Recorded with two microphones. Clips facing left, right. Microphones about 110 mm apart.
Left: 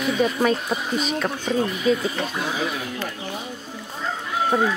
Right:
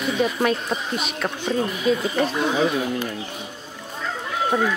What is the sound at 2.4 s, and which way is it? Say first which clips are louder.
Speech: right 6 dB; 30° right (ahead or behind).